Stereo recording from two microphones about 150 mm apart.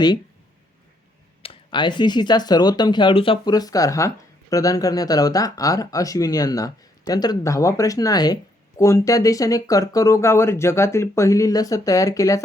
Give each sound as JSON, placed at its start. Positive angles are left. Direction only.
{"t": 1.4, "sound": "speech", "side_deg": 35}